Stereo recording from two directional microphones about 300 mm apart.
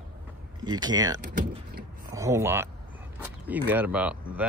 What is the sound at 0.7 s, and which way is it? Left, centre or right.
Speech, centre.